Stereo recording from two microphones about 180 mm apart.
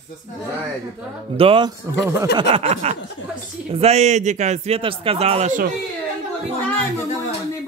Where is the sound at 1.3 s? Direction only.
30° right (ahead or behind).